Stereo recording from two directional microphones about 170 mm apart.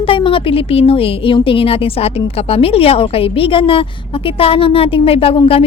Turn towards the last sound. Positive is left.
turn(degrees=35)  # may be behind; listen again after turning